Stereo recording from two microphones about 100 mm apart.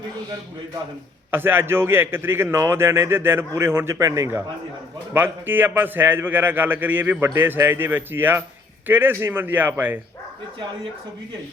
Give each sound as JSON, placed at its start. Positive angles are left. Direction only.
{"t": 1.3, "sound": "a man's voice", "side_deg": -20}